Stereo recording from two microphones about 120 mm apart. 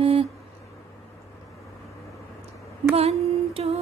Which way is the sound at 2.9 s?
55° right (ahead or behind).